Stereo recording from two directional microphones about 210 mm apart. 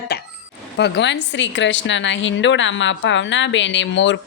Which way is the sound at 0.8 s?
55° left (ahead or behind).